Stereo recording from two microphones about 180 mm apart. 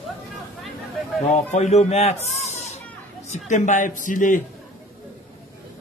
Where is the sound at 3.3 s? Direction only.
45° left (ahead or behind).